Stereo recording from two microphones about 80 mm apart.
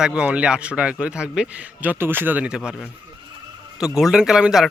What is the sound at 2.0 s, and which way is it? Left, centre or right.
Speech, right.